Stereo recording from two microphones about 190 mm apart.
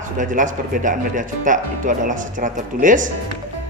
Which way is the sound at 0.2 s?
40° right (ahead or behind).